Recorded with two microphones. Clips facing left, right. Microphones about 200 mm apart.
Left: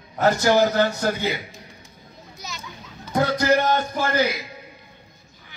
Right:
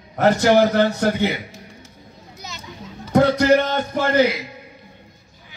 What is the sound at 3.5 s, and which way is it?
Speech, 65° right (ahead or behind).